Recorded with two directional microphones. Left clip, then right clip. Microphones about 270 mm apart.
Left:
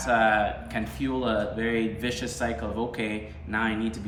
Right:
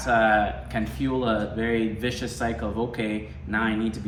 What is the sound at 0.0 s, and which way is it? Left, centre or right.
Speech, centre.